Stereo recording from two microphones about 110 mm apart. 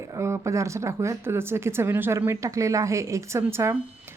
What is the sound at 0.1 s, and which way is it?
A woman's voice, 25° right (ahead or behind).